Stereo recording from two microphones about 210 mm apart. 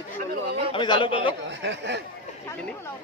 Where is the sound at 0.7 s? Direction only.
25° left (ahead or behind).